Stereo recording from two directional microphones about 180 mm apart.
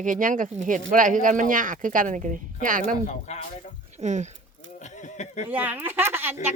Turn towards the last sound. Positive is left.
turn(degrees=-10)  # may be behind; listen again after turning